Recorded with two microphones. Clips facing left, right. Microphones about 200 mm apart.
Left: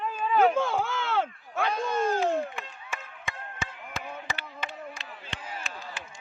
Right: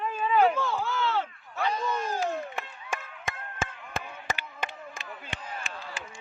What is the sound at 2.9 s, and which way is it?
Chop, 50° right (ahead or behind).